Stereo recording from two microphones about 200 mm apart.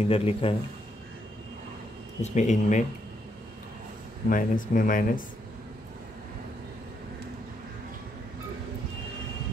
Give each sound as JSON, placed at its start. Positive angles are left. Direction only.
{"t": 0.0, "sound": "speech", "side_deg": 30}
{"t": 2.2, "sound": "speech", "side_deg": 35}
{"t": 4.3, "sound": "speech", "side_deg": 45}